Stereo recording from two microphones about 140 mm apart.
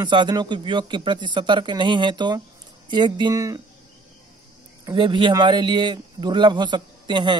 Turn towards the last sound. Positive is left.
turn(degrees=-35)  # may be behind; listen again after turning